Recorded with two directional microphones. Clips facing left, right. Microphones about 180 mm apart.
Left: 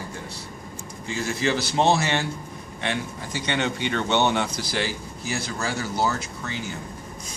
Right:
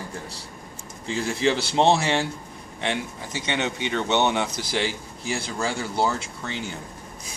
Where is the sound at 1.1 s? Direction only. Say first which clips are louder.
Right 2 dB; 30° right (ahead or behind).